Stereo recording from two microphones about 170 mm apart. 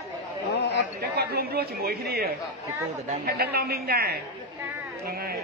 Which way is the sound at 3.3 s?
70° right (ahead or behind).